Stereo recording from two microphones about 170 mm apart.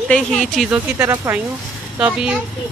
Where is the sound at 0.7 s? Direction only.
10° right (ahead or behind).